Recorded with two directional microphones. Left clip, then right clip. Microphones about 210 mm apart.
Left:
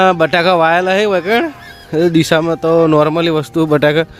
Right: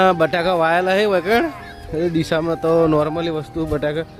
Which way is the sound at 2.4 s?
25° left (ahead or behind).